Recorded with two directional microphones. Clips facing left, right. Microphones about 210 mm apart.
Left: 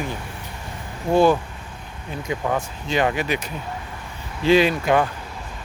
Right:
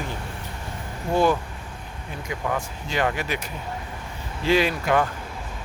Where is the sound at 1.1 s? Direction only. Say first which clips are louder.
Left 4 dB; 30° left (ahead or behind).